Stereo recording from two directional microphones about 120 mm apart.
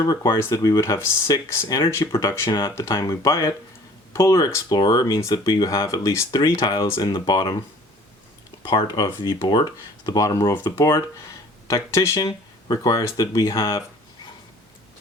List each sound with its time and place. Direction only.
0.0 s speech: 30° left (ahead or behind)
8.6 s speech: 35° left (ahead or behind)